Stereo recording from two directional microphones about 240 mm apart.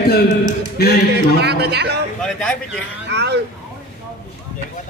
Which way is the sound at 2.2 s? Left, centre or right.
Centre.